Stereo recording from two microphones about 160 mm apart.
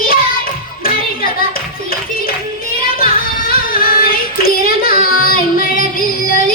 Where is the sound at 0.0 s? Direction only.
65° left (ahead or behind).